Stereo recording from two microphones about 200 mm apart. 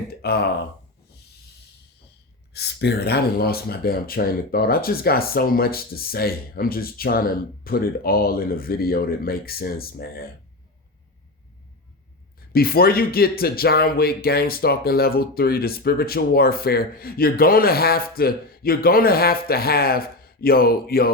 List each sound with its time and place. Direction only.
0.2 s speech: 55° left (ahead or behind)
2.5 s speech: 55° left (ahead or behind)
12.5 s speech: 50° left (ahead or behind)